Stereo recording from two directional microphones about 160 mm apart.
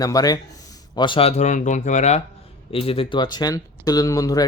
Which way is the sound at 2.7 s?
35° left (ahead or behind).